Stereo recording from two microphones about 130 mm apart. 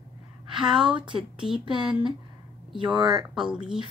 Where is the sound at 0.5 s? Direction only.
40° right (ahead or behind).